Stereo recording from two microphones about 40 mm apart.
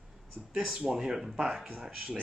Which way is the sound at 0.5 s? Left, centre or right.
Right.